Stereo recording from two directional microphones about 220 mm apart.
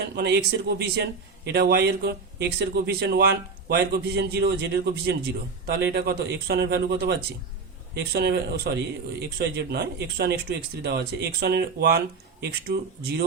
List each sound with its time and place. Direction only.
0.2 s a man's voice: 50° right (ahead or behind)